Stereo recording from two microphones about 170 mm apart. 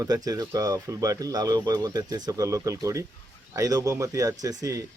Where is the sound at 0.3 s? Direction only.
20° right (ahead or behind).